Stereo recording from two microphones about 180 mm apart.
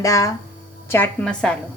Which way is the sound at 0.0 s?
15° left (ahead or behind).